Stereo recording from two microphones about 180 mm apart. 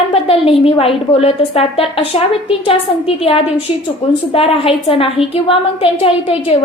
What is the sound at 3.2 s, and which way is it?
A woman's voice, 35° left (ahead or behind).